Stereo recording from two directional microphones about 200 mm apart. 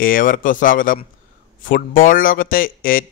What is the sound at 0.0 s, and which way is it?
A man's voice, 45° left (ahead or behind).